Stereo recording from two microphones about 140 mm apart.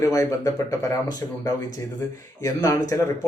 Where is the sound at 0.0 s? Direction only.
25° left (ahead or behind).